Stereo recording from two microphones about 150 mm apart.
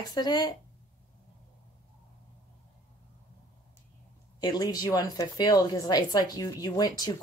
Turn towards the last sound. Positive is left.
turn(degrees=25)  # may be behind; listen again after turning